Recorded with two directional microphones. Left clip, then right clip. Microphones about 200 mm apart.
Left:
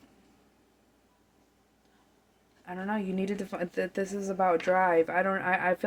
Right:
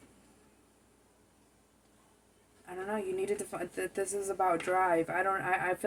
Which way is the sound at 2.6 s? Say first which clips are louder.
Left 2 dB; 50° left (ahead or behind).